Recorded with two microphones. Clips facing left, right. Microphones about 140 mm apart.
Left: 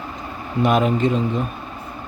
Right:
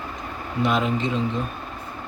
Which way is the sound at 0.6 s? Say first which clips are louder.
Left 5 dB; 50° left (ahead or behind).